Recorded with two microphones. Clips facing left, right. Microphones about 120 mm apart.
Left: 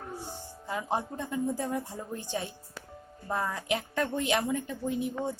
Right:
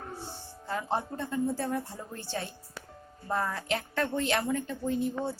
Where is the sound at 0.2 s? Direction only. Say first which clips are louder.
Left 1 dB; 15° left (ahead or behind).